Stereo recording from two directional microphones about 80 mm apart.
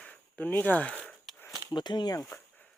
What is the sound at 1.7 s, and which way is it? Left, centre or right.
Speech, left.